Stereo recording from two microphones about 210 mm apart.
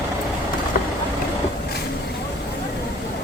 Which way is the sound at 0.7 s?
45° left (ahead or behind).